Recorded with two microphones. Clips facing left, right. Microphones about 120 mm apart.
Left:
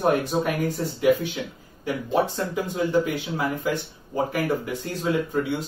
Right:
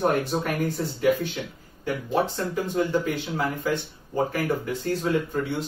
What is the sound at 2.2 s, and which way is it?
Speech, 15° left (ahead or behind).